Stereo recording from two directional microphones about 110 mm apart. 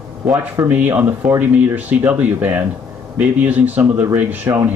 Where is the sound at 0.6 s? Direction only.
15° right (ahead or behind).